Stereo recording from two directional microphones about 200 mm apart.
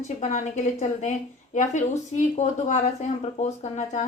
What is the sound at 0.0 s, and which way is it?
A woman's voice, 35° left (ahead or behind).